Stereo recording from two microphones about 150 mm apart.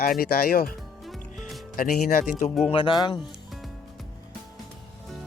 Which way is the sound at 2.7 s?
30° left (ahead or behind).